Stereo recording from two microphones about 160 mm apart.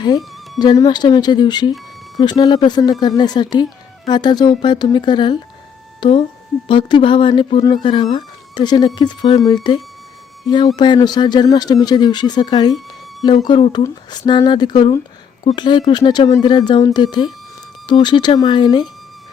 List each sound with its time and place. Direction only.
0.6 s speech: 25° left (ahead or behind)